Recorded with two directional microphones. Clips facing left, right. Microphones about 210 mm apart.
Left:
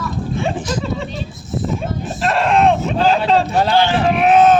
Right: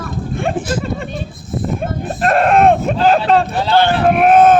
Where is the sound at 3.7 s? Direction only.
55° right (ahead or behind).